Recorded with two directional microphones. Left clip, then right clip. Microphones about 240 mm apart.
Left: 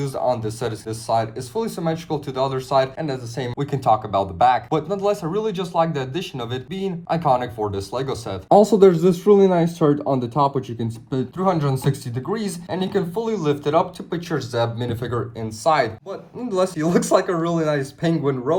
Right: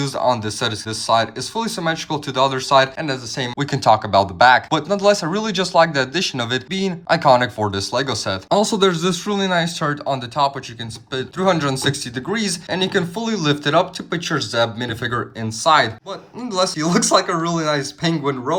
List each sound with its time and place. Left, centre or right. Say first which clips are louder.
0.0 s speech: right 3 dB; centre
10.8 s speech: even; centre